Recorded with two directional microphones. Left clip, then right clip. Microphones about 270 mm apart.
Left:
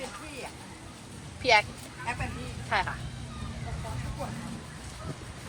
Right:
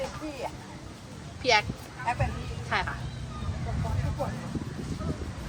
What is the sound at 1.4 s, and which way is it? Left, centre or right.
Speech, centre.